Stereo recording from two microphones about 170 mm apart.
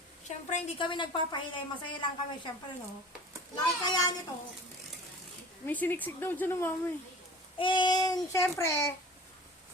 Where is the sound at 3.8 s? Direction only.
25° left (ahead or behind).